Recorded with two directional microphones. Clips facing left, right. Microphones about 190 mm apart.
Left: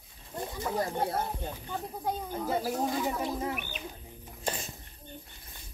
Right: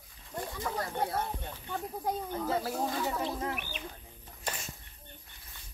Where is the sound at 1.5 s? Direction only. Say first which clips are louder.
Even; 10° left (ahead or behind).